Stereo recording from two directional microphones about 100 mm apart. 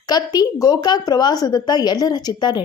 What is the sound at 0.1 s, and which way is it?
A woman's voice, 40° left (ahead or behind).